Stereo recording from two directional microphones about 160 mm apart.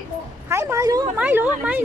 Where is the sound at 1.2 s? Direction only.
10° right (ahead or behind).